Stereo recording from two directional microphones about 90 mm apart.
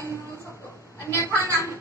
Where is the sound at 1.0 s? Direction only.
30° left (ahead or behind).